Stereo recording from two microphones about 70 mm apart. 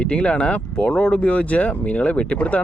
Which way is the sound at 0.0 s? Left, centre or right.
Centre.